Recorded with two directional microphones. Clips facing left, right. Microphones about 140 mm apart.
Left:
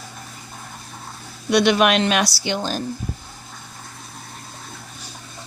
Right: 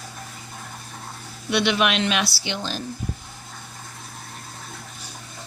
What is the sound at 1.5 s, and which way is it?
A woman's voice, 45° left (ahead or behind).